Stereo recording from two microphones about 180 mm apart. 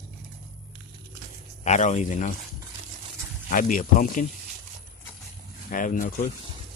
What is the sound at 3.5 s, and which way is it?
Speech, 45° left (ahead or behind).